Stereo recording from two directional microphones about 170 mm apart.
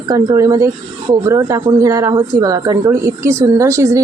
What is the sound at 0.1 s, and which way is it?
Speech, 20° right (ahead or behind).